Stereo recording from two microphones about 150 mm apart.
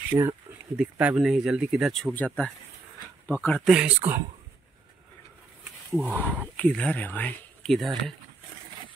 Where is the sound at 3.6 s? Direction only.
5° right (ahead or behind).